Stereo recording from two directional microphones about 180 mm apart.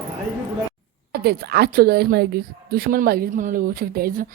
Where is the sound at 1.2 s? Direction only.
60° right (ahead or behind).